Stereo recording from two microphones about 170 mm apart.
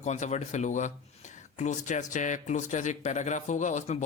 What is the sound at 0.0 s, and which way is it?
Speech, 45° left (ahead or behind).